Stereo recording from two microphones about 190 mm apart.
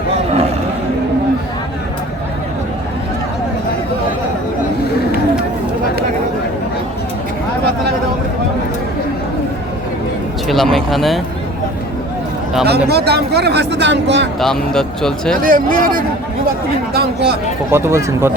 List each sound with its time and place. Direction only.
10.5 s speech: centre (ahead or behind)
12.6 s speech: 60° right (ahead or behind)
14.3 s speech: centre (ahead or behind)
15.4 s speech: 45° right (ahead or behind)
17.7 s speech: 15° right (ahead or behind)